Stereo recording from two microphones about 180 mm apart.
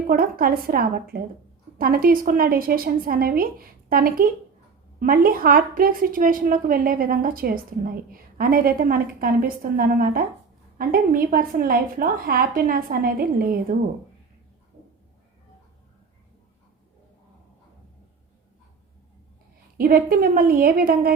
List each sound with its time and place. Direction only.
0.1 s a woman's voice: 55° right (ahead or behind)
19.7 s a woman's voice: 55° right (ahead or behind)